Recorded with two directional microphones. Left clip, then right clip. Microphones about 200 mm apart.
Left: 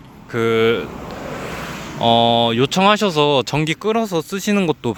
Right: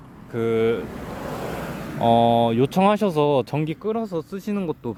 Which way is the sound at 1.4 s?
50° right (ahead or behind).